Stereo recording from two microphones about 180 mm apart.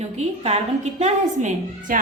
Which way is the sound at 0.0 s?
35° right (ahead or behind).